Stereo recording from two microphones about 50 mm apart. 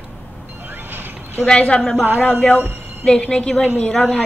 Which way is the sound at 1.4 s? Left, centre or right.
Centre.